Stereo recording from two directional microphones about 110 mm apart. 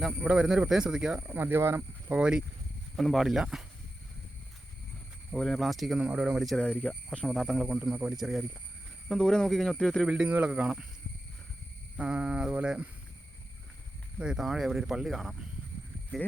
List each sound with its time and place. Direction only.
0.3 s speech: 5° right (ahead or behind)
1.4 s speech: 20° right (ahead or behind)
2.1 s speech: 10° right (ahead or behind)
5.3 s speech: centre (ahead or behind)
10.1 s speech: 10° right (ahead or behind)
11.9 s speech: 10° right (ahead or behind)
14.2 s speech: 5° right (ahead or behind)